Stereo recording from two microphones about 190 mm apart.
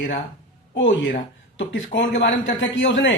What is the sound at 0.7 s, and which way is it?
Speech, 75° left (ahead or behind).